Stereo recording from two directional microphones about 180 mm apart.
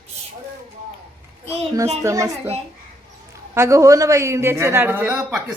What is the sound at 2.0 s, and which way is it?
Speech, 15° right (ahead or behind).